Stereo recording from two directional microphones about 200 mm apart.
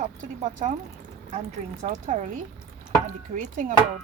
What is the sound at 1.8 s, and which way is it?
Speech, 35° right (ahead or behind).